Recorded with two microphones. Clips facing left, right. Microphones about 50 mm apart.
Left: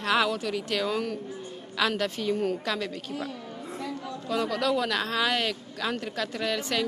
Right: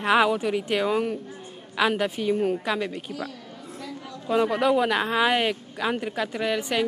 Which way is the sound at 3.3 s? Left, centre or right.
Left.